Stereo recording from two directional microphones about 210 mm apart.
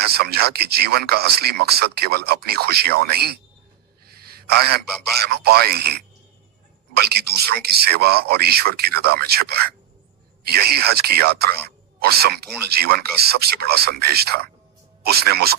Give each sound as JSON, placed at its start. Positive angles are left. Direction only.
{"t": 0.1, "sound": "speech", "side_deg": -50}
{"t": 4.0, "sound": "a sound", "side_deg": -45}
{"t": 5.2, "sound": "speech", "side_deg": -50}
{"t": 7.4, "sound": "speech", "side_deg": -50}